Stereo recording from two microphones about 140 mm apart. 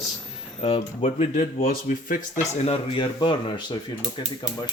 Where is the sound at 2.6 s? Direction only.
40° left (ahead or behind).